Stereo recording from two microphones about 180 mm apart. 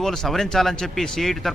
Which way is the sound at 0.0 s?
Centre (ahead or behind).